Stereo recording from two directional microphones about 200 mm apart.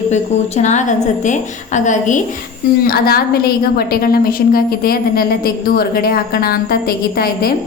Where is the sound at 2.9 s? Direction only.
50° left (ahead or behind).